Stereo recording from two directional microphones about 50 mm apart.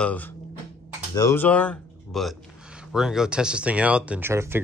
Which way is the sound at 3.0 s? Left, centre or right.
Centre.